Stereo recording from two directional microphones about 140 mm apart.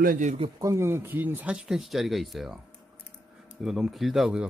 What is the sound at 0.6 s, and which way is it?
Speech, 20° right (ahead or behind).